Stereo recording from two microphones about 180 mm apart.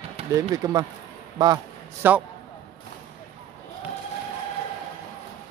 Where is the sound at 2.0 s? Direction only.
10° right (ahead or behind).